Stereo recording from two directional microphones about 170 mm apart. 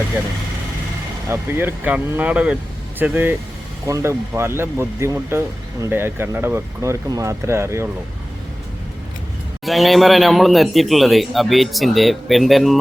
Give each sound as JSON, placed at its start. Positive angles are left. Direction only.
{"t": 1.3, "sound": "speech", "side_deg": -15}
{"t": 9.6, "sound": "a man's voice", "side_deg": 0}